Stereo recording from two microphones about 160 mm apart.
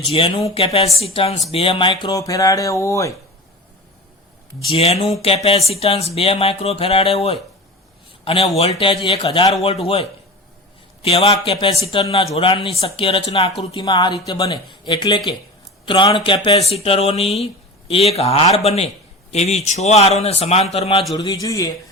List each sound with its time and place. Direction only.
0.1 s speech: 35° left (ahead or behind)
4.7 s speech: 35° left (ahead or behind)
9.2 s speech: 25° left (ahead or behind)
9.8 s speech: 35° left (ahead or behind)
13.9 s speech: 25° left (ahead or behind)
14.5 s speech: 35° left (ahead or behind)
21.4 s speech: 20° left (ahead or behind)